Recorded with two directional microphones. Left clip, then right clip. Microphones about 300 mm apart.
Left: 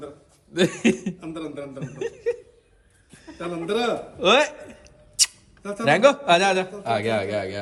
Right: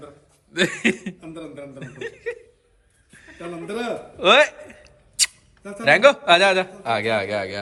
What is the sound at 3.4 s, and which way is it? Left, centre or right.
A man's voice, centre.